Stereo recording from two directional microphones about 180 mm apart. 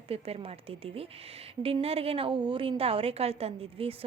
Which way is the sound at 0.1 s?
35° right (ahead or behind).